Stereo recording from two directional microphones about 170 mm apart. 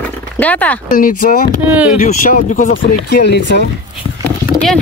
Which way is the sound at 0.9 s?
55° left (ahead or behind).